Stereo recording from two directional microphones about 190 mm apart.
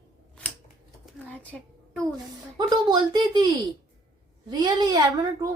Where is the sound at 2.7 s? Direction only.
20° right (ahead or behind).